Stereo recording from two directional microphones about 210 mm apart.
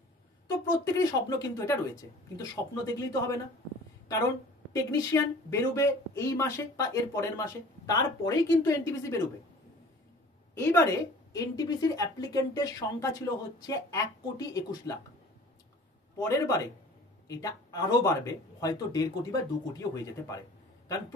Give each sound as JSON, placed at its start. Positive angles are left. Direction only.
{"t": 0.7, "sound": "a woman's voice", "side_deg": 15}
{"t": 4.9, "sound": "a woman's voice", "side_deg": 15}
{"t": 10.5, "sound": "a woman's voice", "side_deg": 10}
{"t": 16.2, "sound": "a woman's voice", "side_deg": 15}